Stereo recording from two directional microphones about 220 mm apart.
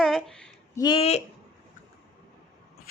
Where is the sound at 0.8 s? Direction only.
20° left (ahead or behind).